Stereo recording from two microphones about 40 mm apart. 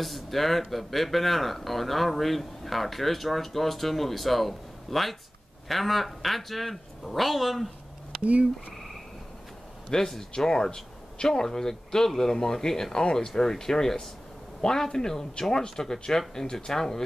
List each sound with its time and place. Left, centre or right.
0.0 s speech: centre
8.2 s speech: right
9.8 s speech: centre